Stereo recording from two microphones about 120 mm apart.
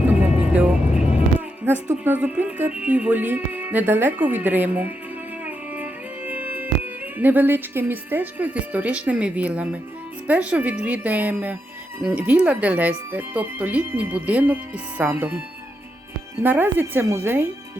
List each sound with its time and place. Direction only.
0.2 s music: 10° right (ahead or behind)
2.0 s speech: 15° right (ahead or behind)
5.5 s music: 15° right (ahead or behind)
10.2 s speech: 10° right (ahead or behind)
16.4 s speech: 15° right (ahead or behind)